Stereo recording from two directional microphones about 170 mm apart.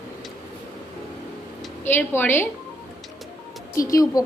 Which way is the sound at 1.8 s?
10° left (ahead or behind).